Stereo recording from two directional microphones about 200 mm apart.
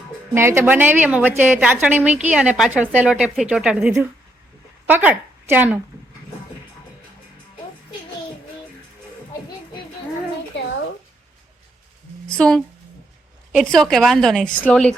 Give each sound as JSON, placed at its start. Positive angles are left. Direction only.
{"t": 0.3, "sound": "a woman's voice", "side_deg": -10}
{"t": 12.3, "sound": "a woman's voice", "side_deg": 5}